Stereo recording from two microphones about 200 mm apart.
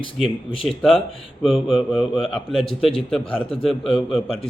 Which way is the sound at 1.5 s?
Centre (ahead or behind).